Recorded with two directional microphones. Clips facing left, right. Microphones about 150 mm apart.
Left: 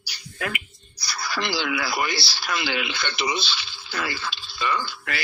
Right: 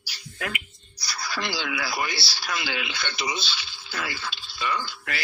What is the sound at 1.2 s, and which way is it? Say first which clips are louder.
Speech: left 4 dB; 75° left (ahead or behind).